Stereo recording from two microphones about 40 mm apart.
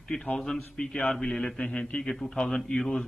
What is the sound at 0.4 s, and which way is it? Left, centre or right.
A man's voice, centre.